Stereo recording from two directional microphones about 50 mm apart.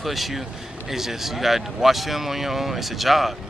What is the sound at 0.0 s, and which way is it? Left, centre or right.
Speech, centre.